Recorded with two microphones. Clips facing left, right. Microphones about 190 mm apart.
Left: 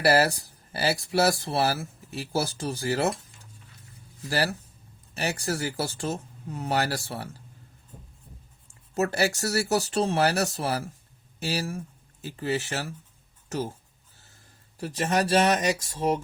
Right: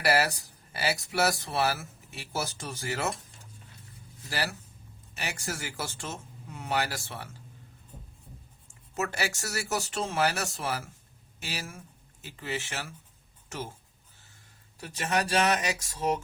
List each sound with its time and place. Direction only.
0.0 s speech: 35° left (ahead or behind)
4.3 s speech: 40° left (ahead or behind)
9.0 s speech: 40° left (ahead or behind)
14.8 s speech: 35° left (ahead or behind)